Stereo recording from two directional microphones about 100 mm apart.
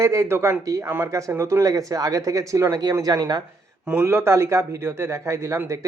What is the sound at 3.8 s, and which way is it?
A man's voice, 15° right (ahead or behind).